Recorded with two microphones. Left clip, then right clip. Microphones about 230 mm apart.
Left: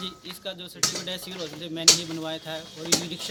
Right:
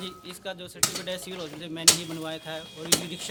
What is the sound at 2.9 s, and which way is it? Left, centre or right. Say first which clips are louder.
Speech: left 1 dB; right.